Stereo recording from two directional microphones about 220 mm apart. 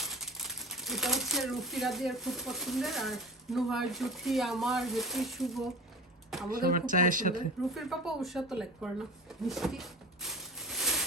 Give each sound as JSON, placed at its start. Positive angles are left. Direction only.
{"t": 0.0, "sound": "speech", "side_deg": 0}
{"t": 6.5, "sound": "speech", "side_deg": -40}
{"t": 7.7, "sound": "speech", "side_deg": 0}
{"t": 9.5, "sound": "a sound", "side_deg": 0}